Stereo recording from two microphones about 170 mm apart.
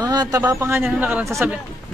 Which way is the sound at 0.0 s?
25° right (ahead or behind).